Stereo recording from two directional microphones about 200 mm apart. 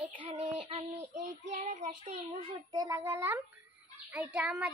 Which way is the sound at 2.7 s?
20° right (ahead or behind).